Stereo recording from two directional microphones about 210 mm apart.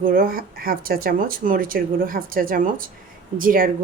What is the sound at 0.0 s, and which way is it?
A woman's voice, 45° right (ahead or behind).